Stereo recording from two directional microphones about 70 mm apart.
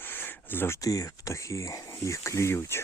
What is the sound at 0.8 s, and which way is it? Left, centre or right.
Speech, left.